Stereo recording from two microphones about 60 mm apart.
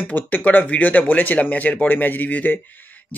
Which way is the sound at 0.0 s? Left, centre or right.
Left.